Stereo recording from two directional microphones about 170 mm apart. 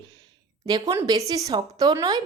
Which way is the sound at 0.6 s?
20° right (ahead or behind).